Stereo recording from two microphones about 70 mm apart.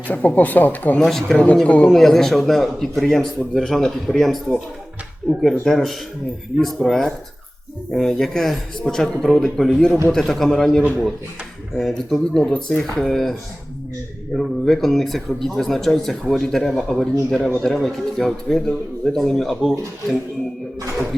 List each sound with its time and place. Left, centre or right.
0.1 s speech: left
0.9 s speech: centre
1.6 s speech: centre
1.9 s speech: centre
14.3 s speech: centre